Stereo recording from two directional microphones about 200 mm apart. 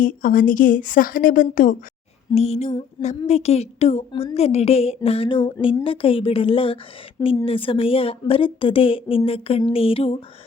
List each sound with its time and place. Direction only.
0.0 s a woman's voice: 45° left (ahead or behind)
2.3 s a woman's voice: 30° left (ahead or behind)